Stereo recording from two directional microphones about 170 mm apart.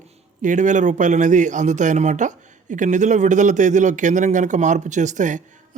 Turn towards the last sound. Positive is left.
turn(degrees=-45)  # may be behind; listen again after turning